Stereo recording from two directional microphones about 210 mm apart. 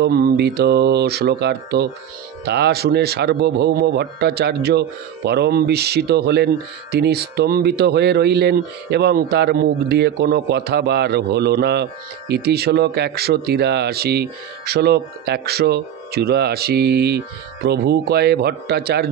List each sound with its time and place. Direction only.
0.0 s a man's voice: 50° right (ahead or behind)